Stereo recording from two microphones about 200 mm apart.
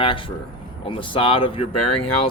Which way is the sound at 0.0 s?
25° left (ahead or behind).